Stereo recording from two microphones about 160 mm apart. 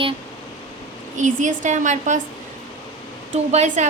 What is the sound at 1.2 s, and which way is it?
A woman's voice, 50° right (ahead or behind).